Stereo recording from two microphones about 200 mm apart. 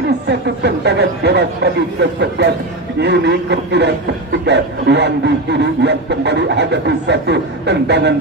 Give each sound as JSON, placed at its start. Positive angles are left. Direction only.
{"t": 0.3, "sound": "speech", "side_deg": -55}